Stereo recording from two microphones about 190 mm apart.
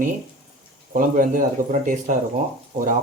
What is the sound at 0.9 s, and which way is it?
Speech, 45° right (ahead or behind).